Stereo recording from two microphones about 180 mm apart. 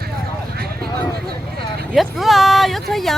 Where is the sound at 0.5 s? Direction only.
60° right (ahead or behind).